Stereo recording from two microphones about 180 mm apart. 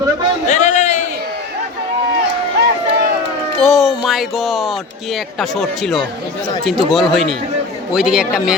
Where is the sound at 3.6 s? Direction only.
Centre (ahead or behind).